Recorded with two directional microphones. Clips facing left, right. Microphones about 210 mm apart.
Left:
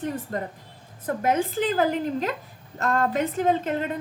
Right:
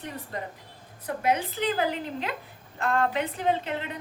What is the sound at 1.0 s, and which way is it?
A woman's voice, 45° left (ahead or behind).